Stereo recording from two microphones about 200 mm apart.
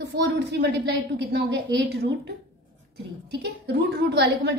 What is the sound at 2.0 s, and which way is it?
A woman's voice, 55° right (ahead or behind).